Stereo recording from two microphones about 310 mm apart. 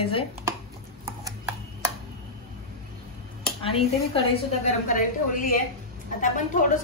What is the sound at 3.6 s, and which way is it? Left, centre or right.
A woman's voice, centre.